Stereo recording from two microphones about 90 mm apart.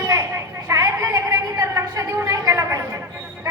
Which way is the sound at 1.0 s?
35° right (ahead or behind).